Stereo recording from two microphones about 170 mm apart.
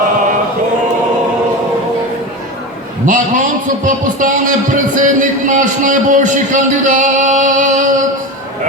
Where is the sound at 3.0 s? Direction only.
50° right (ahead or behind).